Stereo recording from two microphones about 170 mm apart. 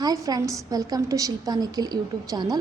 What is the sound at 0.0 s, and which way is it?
A woman's voice, 20° right (ahead or behind).